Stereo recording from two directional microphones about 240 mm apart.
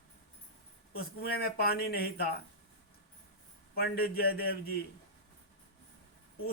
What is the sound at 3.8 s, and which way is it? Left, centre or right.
Speech, left.